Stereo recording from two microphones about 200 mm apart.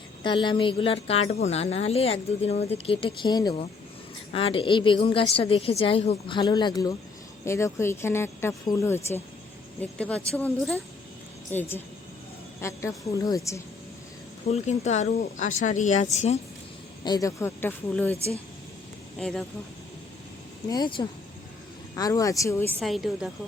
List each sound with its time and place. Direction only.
0.2 s speech: 25° left (ahead or behind)
14.5 s speech: 35° left (ahead or behind)
17.0 s speech: 20° left (ahead or behind)
19.2 s speech: centre (ahead or behind)
20.7 s speech: 20° left (ahead or behind)
22.8 s speech: centre (ahead or behind)